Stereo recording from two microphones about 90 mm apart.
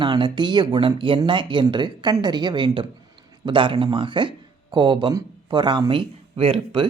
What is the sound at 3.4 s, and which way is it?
Speech, 70° right (ahead or behind).